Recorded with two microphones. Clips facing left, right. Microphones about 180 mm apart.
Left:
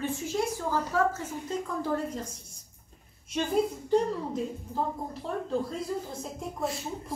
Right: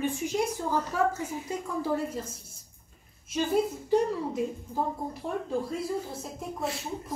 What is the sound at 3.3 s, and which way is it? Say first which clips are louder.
A woman's voice: right 1 dB; 5° right (ahead or behind).